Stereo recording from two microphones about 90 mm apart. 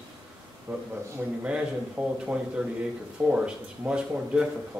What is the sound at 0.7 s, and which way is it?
Speech, 25° right (ahead or behind).